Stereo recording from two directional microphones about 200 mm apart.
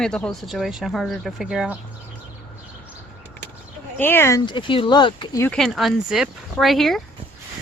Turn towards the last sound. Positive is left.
turn(degrees=0)  # may be behind; listen again after turning